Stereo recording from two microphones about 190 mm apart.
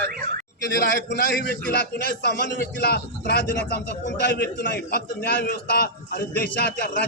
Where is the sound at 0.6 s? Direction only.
60° left (ahead or behind).